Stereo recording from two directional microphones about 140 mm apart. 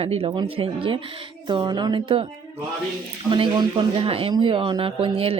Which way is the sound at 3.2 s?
35° right (ahead or behind).